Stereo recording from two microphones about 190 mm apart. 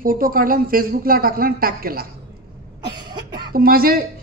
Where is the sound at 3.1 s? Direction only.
20° right (ahead or behind).